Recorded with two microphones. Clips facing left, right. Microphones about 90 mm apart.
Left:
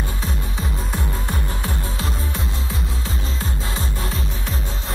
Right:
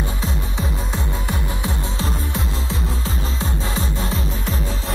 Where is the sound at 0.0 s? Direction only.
25° right (ahead or behind).